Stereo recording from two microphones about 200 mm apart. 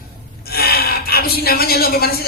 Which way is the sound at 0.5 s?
50° left (ahead or behind).